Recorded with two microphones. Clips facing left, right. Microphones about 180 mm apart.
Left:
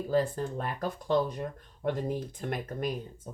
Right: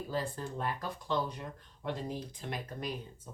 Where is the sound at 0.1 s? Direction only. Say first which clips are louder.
Left 9 dB; 50° left (ahead or behind).